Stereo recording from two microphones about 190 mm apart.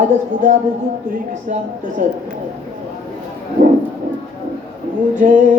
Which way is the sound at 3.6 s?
45° right (ahead or behind).